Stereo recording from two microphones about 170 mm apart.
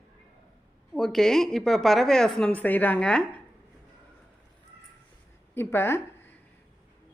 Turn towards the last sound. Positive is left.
turn(degrees=15)  # may be behind; listen again after turning